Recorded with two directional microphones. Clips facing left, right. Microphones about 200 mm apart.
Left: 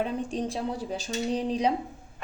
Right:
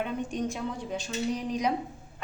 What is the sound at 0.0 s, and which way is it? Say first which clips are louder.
A woman's voice: left 2 dB; 30° left (ahead or behind).